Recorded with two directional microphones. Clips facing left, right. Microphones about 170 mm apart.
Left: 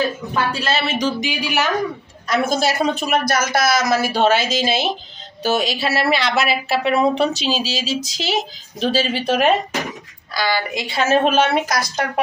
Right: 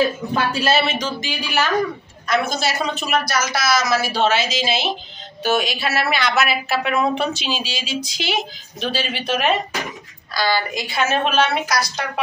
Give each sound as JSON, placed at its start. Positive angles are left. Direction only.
{"t": 0.8, "sound": "speech", "side_deg": 15}
{"t": 2.2, "sound": "speech", "side_deg": 45}
{"t": 5.4, "sound": "a woman's voice", "side_deg": 35}
{"t": 10.3, "sound": "a woman's voice", "side_deg": 15}
{"t": 11.2, "sound": "speech", "side_deg": 45}